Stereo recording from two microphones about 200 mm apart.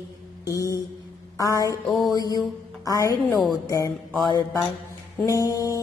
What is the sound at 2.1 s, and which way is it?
A woman's voice, 20° left (ahead or behind).